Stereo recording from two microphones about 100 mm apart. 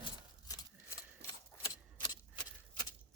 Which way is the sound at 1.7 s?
40° left (ahead or behind).